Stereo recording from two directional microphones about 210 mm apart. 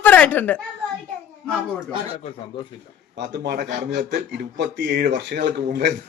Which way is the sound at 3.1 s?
55° right (ahead or behind).